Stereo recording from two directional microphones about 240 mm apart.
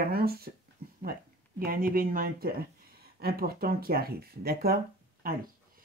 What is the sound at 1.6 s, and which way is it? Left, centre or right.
Speech, right.